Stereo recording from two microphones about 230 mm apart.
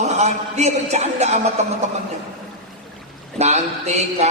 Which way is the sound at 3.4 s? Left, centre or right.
Right.